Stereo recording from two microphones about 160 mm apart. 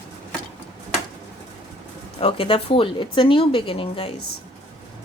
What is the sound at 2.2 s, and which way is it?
A woman's voice, 35° left (ahead or behind).